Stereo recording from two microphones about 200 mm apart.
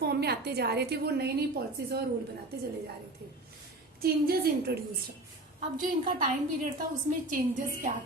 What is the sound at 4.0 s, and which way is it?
Speech, 50° right (ahead or behind).